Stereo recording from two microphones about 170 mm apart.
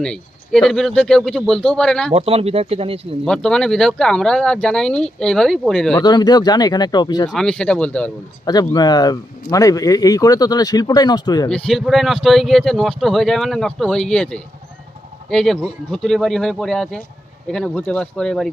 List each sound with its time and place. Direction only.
0.0 s speech: 5° left (ahead or behind)
2.1 s speech: 35° right (ahead or behind)
3.2 s speech: 5° left (ahead or behind)
6.0 s speech: 25° left (ahead or behind)
7.3 s speech: 5° left (ahead or behind)
8.7 s speech: 25° left (ahead or behind)
11.4 s speech: 5° left (ahead or behind)